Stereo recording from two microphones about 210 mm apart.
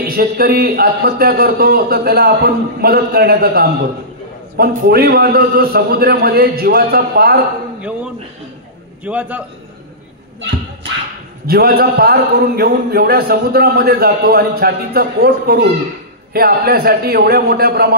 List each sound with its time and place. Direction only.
0.0 s a man's voice: 45° right (ahead or behind)
9.0 s a man's voice: 5° right (ahead or behind)
11.4 s a man's voice: 45° right (ahead or behind)